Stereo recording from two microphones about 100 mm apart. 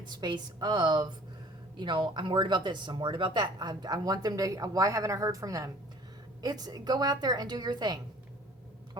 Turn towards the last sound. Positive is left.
turn(degrees=-45)  # may be behind; listen again after turning